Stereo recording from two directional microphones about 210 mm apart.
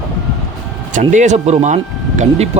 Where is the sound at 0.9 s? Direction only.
35° right (ahead or behind).